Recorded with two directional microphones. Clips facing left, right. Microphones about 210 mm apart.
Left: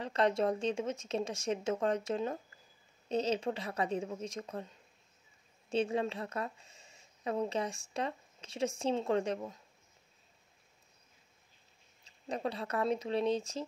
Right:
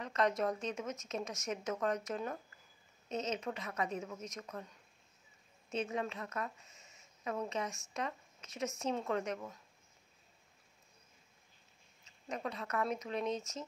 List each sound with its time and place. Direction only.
0.0 s speech: 30° left (ahead or behind)
5.7 s speech: 30° left (ahead or behind)
12.0 s speech: 30° left (ahead or behind)